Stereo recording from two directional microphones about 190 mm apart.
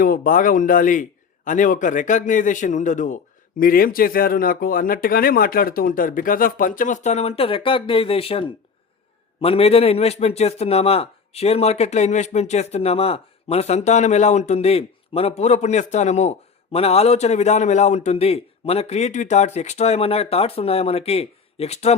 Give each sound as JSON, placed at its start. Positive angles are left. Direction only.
{"t": 0.0, "sound": "a man's voice", "side_deg": 45}